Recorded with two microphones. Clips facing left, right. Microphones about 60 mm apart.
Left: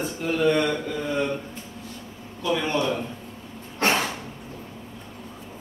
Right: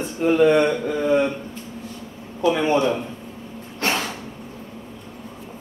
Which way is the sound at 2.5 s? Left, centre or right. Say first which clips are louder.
Right 5 dB; right.